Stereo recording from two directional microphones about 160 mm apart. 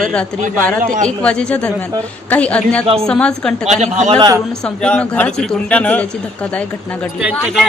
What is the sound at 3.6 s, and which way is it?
Speech, 45° right (ahead or behind).